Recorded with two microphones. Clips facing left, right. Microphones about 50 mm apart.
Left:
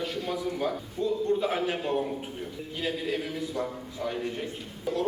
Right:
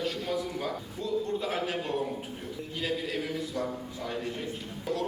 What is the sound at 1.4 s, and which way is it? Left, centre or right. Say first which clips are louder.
Speech: left 3 dB; left.